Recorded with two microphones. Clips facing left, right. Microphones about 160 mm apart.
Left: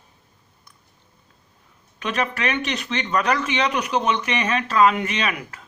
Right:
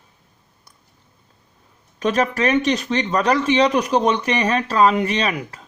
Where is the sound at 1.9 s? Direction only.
40° right (ahead or behind).